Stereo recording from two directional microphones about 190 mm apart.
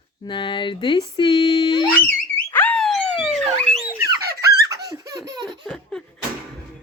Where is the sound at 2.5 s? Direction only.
10° left (ahead or behind).